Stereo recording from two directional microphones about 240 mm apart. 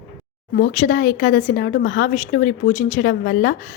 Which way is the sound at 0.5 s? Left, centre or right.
Left.